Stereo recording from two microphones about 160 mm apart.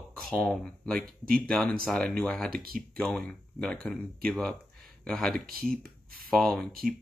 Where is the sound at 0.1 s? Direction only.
5° left (ahead or behind).